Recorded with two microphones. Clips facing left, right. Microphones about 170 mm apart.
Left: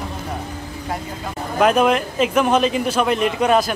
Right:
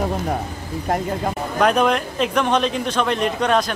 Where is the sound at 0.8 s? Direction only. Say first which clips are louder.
Right 7 dB; 50° right (ahead or behind).